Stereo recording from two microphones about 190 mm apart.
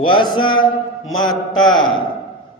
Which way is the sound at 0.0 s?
25° left (ahead or behind).